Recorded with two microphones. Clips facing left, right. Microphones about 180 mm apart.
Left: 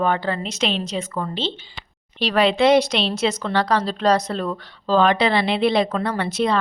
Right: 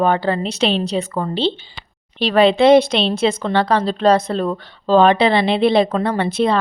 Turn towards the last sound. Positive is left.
turn(degrees=-30)  # may be behind; listen again after turning